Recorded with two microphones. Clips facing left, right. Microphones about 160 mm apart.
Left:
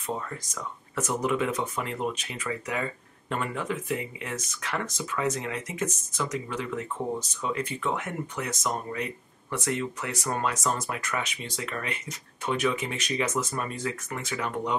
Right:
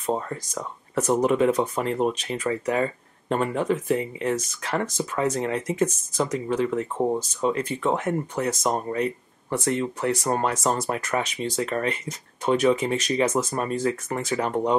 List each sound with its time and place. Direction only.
0.0 s speech: 35° right (ahead or behind)